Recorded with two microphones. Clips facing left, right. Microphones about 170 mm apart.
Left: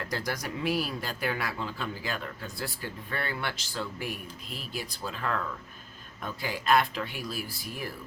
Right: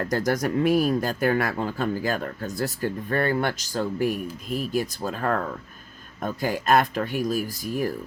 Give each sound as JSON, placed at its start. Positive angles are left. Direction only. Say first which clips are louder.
{"t": 0.0, "sound": "speech", "louder": "right 10 dB", "side_deg": -45}